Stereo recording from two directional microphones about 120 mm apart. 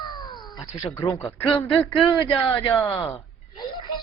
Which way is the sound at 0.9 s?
20° left (ahead or behind).